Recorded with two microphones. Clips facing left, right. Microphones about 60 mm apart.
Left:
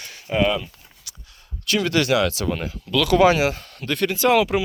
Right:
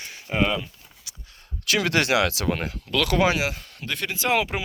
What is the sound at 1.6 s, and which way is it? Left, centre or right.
Speech, right.